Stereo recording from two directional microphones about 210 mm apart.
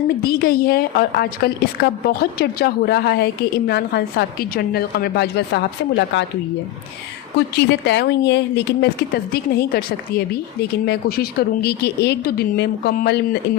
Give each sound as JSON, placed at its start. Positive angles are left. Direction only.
{"t": 0.2, "sound": "speech", "side_deg": 45}
{"t": 7.3, "sound": "speech", "side_deg": 55}